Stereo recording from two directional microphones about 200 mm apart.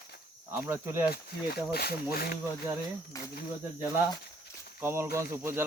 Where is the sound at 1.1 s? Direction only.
50° left (ahead or behind).